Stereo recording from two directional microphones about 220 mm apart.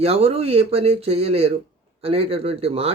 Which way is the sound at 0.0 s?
25° right (ahead or behind).